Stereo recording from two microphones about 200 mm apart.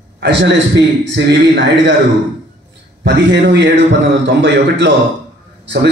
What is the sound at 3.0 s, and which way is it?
A man's voice, 60° right (ahead or behind).